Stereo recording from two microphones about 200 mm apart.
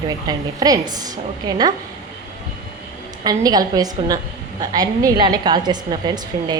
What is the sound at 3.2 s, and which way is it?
A woman's voice, 20° right (ahead or behind).